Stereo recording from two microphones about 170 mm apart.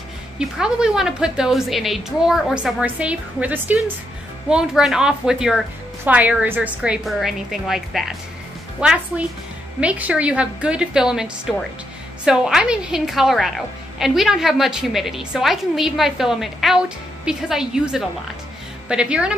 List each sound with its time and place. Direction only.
0.4 s a woman's voice: 5° right (ahead or behind)